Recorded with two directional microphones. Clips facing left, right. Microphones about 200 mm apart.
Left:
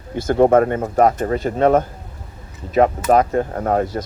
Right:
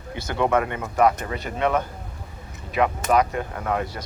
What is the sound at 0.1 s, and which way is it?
Speech, 45° left (ahead or behind).